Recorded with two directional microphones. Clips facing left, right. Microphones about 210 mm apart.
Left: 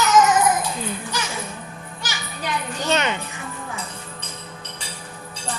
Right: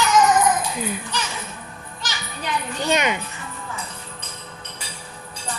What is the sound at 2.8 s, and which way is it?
Music, 15° right (ahead or behind).